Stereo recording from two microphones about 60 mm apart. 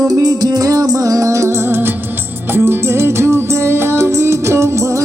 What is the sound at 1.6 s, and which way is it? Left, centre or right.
Music, right.